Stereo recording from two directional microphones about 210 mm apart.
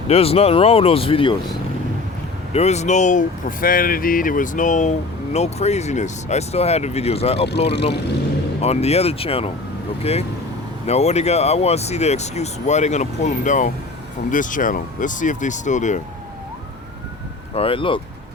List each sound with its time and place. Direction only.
0.1 s speech: 30° left (ahead or behind)
8.6 s speech: 30° left (ahead or behind)
17.5 s speech: 25° left (ahead or behind)